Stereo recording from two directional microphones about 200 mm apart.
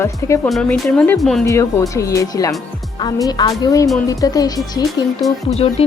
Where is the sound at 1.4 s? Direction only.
15° left (ahead or behind).